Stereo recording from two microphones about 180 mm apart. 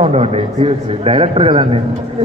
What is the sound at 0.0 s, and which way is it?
A man's voice, 35° right (ahead or behind).